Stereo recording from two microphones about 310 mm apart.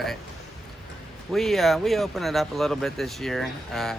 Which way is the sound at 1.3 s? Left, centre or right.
Centre.